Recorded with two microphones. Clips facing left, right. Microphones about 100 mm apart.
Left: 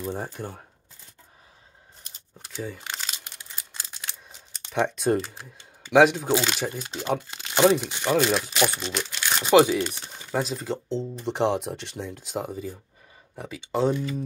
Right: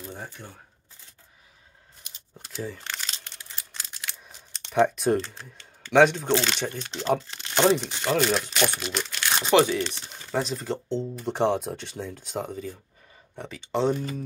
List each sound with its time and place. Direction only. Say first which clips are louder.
0.0 s speech: left 8 dB; 45° left (ahead or behind)
2.6 s speech: even; 5° left (ahead or behind)
3.1 s a sound: left 1 dB; 15° left (ahead or behind)
4.6 s speech: right 2 dB; centre (ahead or behind)
9.5 s speech: left 3 dB; 15° left (ahead or behind)